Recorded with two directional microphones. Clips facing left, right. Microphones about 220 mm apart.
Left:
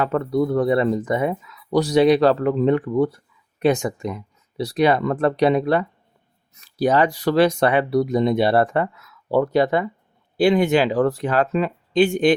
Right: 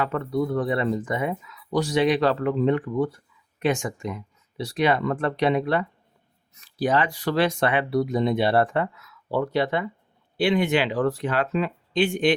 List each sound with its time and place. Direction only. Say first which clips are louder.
0.0 s speech: left 5 dB; 40° left (ahead or behind)